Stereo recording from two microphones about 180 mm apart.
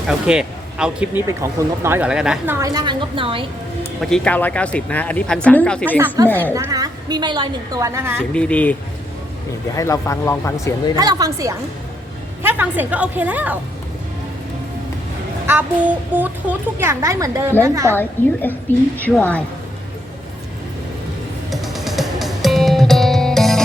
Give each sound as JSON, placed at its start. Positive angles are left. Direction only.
{"t": 0.1, "sound": "speech", "side_deg": -5}
{"t": 1.3, "sound": "a child's voice", "side_deg": -15}
{"t": 2.6, "sound": "a woman's voice", "side_deg": -20}
{"t": 4.0, "sound": "speech", "side_deg": 5}
{"t": 6.5, "sound": "a woman's voice", "side_deg": -15}
{"t": 8.2, "sound": "speech", "side_deg": 5}
{"t": 9.7, "sound": "speech", "side_deg": 15}
{"t": 10.9, "sound": "a woman's voice", "side_deg": -20}
{"t": 15.4, "sound": "a child's voice", "side_deg": -10}
{"t": 17.9, "sound": "speech", "side_deg": 10}
{"t": 21.5, "sound": "music", "side_deg": 0}